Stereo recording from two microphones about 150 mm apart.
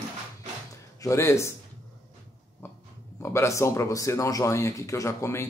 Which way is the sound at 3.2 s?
20° left (ahead or behind).